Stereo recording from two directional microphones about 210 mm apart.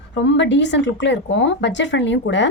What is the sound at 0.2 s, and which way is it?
A woman's voice, 60° left (ahead or behind).